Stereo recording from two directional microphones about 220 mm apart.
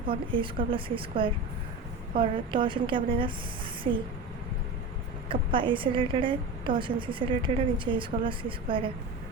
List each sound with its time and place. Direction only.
0.1 s a woman's voice: 25° right (ahead or behind)
5.3 s a woman's voice: 25° right (ahead or behind)